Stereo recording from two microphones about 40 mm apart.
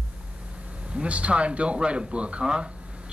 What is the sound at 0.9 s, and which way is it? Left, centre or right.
Speech, right.